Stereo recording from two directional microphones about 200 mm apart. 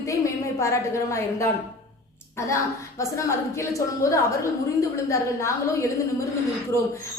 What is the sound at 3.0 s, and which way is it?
A woman's voice, 15° left (ahead or behind).